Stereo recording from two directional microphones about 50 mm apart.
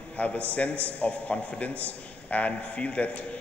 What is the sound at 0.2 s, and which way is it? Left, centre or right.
A man's voice, left.